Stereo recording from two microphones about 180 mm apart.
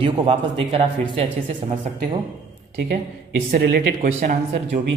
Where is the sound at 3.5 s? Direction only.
55° right (ahead or behind).